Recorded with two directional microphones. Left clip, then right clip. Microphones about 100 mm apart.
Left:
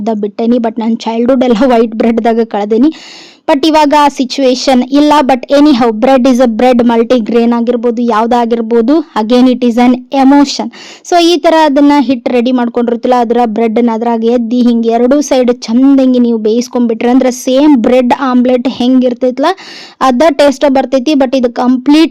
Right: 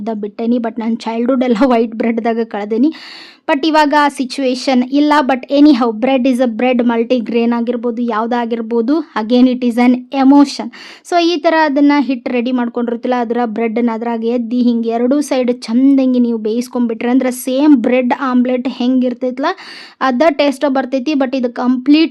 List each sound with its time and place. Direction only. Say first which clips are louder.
0.0 s a woman's voice: left 7 dB; 50° left (ahead or behind)
6.1 s a woman's voice: left 6 dB; 60° left (ahead or behind); by 17.9 s 35° left (ahead or behind)
17.9 s a woman's voice: left 5 dB; 50° left (ahead or behind)